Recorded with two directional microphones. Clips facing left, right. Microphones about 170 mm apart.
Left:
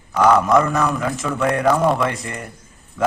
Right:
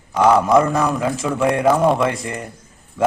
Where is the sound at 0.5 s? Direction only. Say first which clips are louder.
Right 2 dB; 25° right (ahead or behind).